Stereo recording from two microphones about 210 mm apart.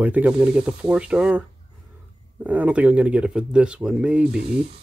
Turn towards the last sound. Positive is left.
turn(degrees=-50)  # may be behind; listen again after turning